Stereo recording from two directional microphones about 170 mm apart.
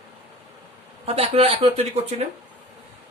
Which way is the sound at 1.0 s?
35° right (ahead or behind).